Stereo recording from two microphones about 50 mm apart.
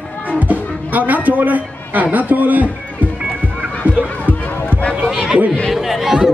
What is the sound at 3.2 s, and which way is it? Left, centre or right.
Music, right.